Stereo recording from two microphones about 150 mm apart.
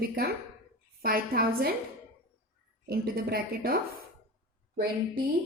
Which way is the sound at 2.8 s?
90° right.